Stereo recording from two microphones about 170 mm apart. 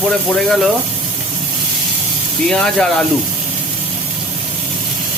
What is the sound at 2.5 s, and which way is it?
Speech, 5° left (ahead or behind).